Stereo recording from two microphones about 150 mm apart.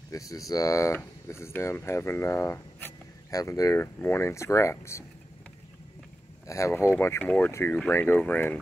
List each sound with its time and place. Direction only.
0.1 s speech: 20° left (ahead or behind)
6.4 s speech: 20° left (ahead or behind)